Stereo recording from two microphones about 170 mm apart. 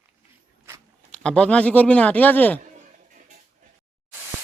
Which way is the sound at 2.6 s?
50° right (ahead or behind).